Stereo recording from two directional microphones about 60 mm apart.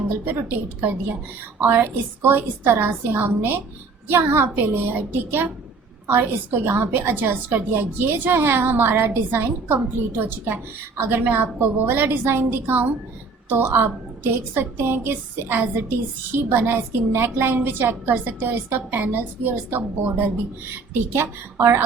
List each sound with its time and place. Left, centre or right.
0.8 s a woman's voice: right